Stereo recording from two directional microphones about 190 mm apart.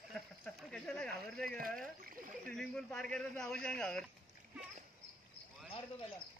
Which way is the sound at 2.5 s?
5° left (ahead or behind).